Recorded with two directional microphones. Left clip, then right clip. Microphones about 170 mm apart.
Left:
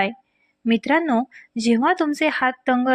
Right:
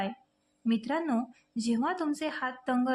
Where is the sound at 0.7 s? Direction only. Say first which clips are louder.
Left 12 dB; 40° left (ahead or behind).